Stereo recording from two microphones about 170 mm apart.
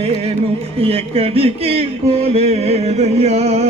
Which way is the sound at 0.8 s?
35° right (ahead or behind).